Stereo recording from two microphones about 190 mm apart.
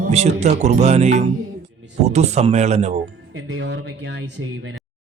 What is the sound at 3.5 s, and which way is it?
Speech, 70° right (ahead or behind).